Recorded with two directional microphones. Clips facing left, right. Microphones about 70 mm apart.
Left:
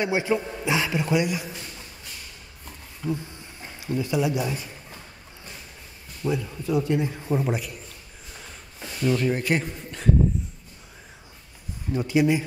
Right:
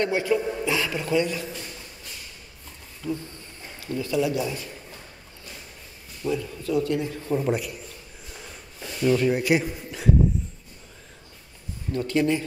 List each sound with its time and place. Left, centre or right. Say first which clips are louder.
0.0 s a man's voice: right 1 dB; centre
3.0 s speech: left 1 dB; centre
6.2 s a man's voice: even; centre
7.4 s speech: right 2 dB; centre
9.0 s speech: right 2 dB; centre
11.9 s speech: left 2 dB; centre